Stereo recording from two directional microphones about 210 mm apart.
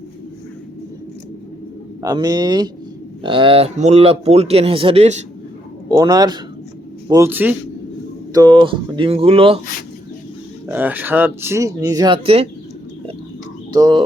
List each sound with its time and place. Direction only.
2.0 s speech: 15° right (ahead or behind)
5.9 s speech: 20° right (ahead or behind)
10.7 s speech: 10° right (ahead or behind); by 12.5 s 25° right (ahead or behind)
13.7 s speech: 20° right (ahead or behind)